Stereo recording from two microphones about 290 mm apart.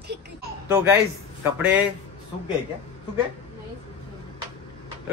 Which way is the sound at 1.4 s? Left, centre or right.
Centre.